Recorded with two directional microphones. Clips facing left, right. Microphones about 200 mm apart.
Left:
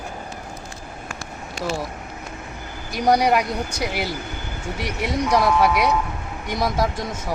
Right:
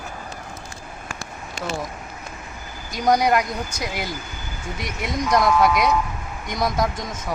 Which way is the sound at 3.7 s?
65° left (ahead or behind).